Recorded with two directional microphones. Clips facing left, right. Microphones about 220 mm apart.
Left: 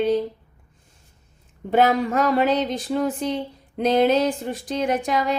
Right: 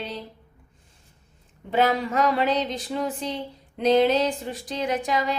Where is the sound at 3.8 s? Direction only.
50° left (ahead or behind).